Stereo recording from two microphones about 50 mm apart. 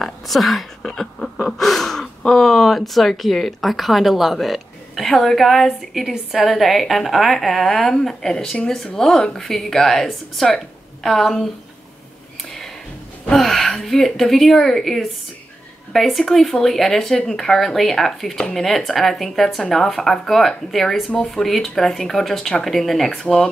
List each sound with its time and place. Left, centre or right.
0.0 s a sound: centre
1.6 s a woman's voice: centre
13.4 s a woman's voice: centre
23.2 s a woman's voice: centre